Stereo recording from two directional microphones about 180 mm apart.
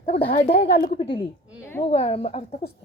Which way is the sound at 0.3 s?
35° left (ahead or behind).